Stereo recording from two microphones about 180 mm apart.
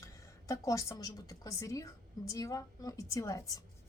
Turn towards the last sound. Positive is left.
turn(degrees=20)  # may be behind; listen again after turning